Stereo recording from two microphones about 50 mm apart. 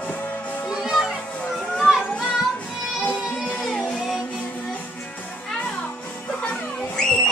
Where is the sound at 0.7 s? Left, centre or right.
Centre.